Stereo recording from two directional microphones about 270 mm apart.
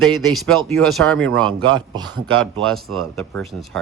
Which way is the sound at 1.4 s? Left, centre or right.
Centre.